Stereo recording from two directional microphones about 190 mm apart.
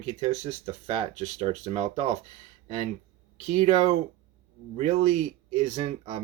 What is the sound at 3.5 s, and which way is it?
Speech, 35° right (ahead or behind).